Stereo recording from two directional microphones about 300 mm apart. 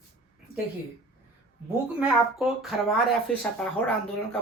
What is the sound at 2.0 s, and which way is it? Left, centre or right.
Speech, centre.